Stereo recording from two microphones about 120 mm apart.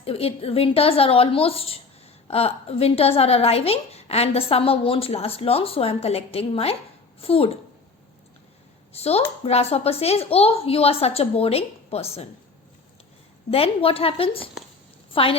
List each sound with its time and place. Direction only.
0.0 s a woman's voice: 55° left (ahead or behind)
8.9 s a woman's voice: 60° left (ahead or behind)
13.5 s a woman's voice: 55° left (ahead or behind)